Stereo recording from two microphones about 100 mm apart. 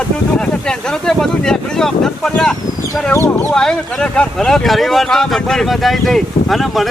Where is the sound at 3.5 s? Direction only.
5° left (ahead or behind).